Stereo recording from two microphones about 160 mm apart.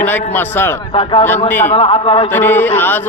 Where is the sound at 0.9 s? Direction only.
30° left (ahead or behind).